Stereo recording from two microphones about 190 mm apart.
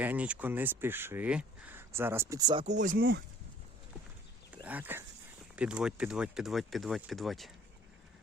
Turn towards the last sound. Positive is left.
turn(degrees=0)  # may be behind; listen again after turning